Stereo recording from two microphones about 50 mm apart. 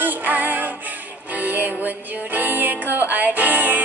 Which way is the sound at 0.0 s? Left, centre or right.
Right.